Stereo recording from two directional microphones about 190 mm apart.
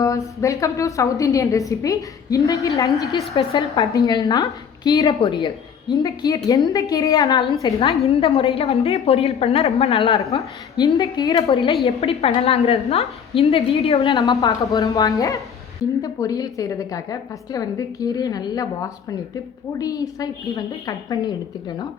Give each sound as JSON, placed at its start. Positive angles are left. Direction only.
{"t": 0.0, "sound": "a woman's voice", "side_deg": 15}
{"t": 3.3, "sound": "a woman's voice", "side_deg": 30}
{"t": 7.6, "sound": "a woman's voice", "side_deg": 30}
{"t": 10.8, "sound": "a woman's voice", "side_deg": 15}
{"t": 11.5, "sound": "a woman's voice", "side_deg": 30}
{"t": 14.4, "sound": "a woman's voice", "side_deg": 15}